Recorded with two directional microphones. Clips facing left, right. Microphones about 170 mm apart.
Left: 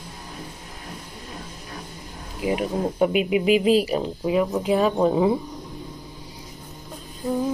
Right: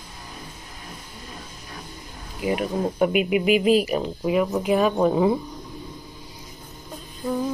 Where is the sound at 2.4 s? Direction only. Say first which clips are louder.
Even; 20° left (ahead or behind).